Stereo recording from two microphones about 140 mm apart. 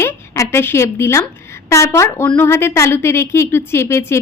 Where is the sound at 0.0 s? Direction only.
20° left (ahead or behind).